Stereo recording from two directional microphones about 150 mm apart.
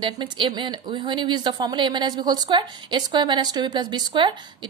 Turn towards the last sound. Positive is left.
turn(degrees=-30)  # may be behind; listen again after turning